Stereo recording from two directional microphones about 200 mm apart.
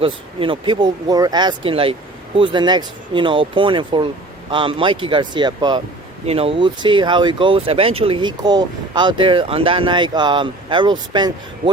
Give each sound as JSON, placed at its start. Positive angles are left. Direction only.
{"t": 0.0, "sound": "speech", "side_deg": -25}